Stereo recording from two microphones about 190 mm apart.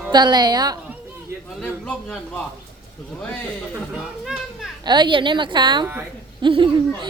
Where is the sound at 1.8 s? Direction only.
5° left (ahead or behind).